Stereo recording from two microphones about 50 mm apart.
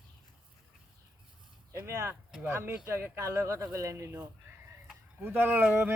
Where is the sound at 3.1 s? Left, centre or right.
Right.